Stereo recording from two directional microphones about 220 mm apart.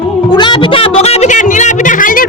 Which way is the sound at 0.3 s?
20° left (ahead or behind).